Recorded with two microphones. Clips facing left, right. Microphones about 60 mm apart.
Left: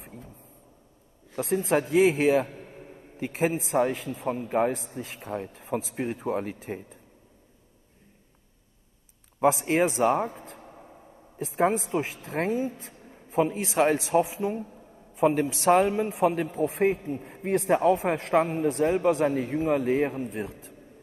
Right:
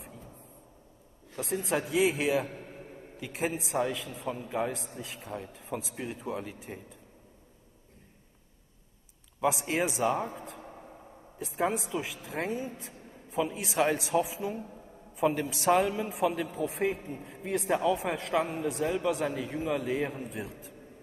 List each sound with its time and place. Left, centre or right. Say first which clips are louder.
0.0 s a sound: left 3 dB; left
1.3 s speech: left 6 dB; left
3.2 s speech: left 6 dB; left
9.4 s speech: left 6 dB; left
12.3 s speech: left 6 dB; left
12.6 s a sound: left 6 dB; left
13.7 s a woman's voice: left 4 dB; left
16.5 s speech: left 6 dB; left
20.4 s a woman's voice: left 3 dB; left